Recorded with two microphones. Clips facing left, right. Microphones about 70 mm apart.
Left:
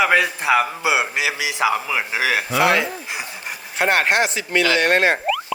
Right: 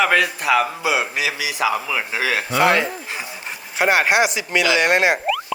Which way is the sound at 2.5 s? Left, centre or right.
Centre.